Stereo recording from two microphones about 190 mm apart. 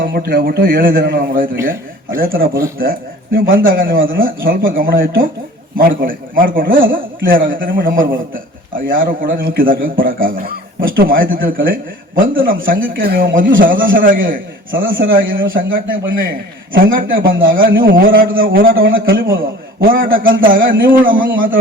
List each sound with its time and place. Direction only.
0.0 s a man's voice: 50° right (ahead or behind)